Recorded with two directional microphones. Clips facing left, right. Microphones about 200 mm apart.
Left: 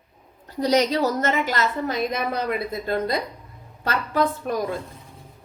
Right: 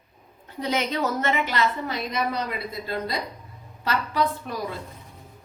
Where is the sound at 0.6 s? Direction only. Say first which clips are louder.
Left 6 dB; 40° left (ahead or behind).